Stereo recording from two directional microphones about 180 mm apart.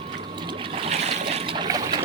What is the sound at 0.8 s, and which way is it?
Trickle, 35° right (ahead or behind).